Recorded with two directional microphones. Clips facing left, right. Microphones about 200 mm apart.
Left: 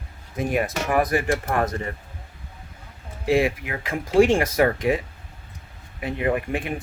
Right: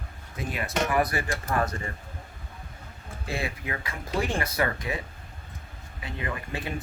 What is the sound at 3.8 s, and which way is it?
Speech, 90° left.